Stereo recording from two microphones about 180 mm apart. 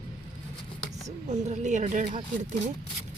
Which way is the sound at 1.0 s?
40° right (ahead or behind).